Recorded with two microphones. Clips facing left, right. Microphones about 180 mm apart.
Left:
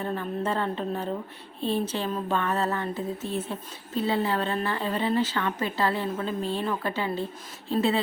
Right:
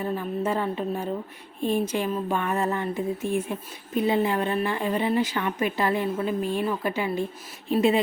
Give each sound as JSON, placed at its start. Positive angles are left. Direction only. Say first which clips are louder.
{"t": 0.0, "sound": "speech", "louder": "right 2 dB", "side_deg": -10}